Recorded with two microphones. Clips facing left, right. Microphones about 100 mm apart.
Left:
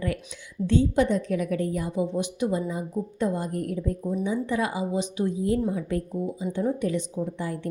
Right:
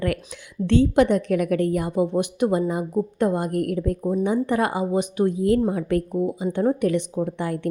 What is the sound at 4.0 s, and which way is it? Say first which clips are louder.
Speech: right 5 dB; 45° right (ahead or behind).